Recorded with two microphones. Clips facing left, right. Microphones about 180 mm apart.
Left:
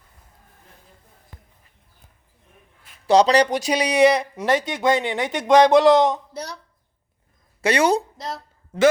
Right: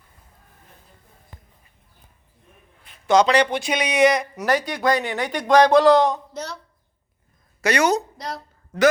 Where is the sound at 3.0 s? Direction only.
35° left (ahead or behind); by 6.5 s 10° left (ahead or behind).